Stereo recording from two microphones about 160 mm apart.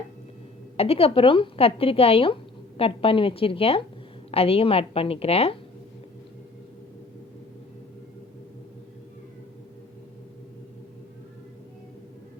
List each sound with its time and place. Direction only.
0.8 s speech: 40° left (ahead or behind)